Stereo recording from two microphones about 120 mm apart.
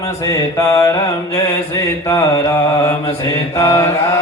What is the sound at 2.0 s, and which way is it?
Mantra, 25° left (ahead or behind).